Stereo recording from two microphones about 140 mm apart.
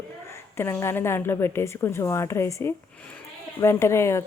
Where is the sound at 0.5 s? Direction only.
20° left (ahead or behind).